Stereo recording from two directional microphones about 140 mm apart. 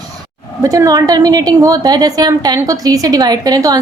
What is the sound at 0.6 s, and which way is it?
A woman's voice, 25° right (ahead or behind).